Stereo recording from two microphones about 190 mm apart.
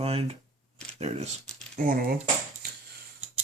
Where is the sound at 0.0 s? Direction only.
30° right (ahead or behind).